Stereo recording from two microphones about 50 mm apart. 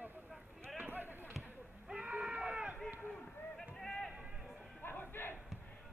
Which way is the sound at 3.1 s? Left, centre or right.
Centre.